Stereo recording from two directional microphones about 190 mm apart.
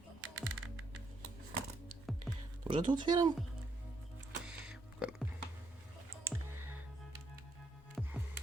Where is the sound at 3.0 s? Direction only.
25° right (ahead or behind).